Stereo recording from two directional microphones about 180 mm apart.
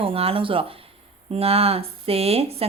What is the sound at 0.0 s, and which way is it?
Speech, 30° right (ahead or behind).